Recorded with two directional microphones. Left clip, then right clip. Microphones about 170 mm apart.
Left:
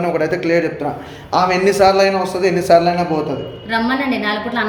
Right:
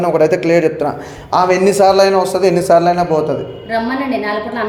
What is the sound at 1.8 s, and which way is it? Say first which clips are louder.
A man's voice: right 3 dB; 45° right (ahead or behind).